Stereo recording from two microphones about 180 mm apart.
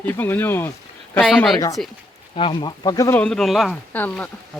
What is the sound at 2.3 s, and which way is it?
Speech, 25° left (ahead or behind).